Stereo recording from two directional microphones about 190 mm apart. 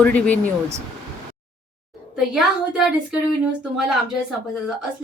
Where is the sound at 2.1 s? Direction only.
5° right (ahead or behind).